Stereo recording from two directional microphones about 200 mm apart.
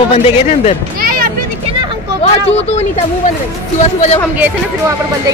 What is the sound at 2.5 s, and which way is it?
Speech, 35° left (ahead or behind).